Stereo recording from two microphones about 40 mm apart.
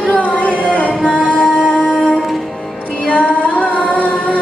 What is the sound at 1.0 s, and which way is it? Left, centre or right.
Music, left.